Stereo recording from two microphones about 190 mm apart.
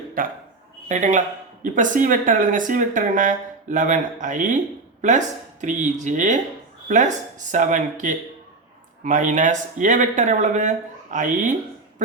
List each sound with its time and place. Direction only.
0.2 s speech: 50° right (ahead or behind)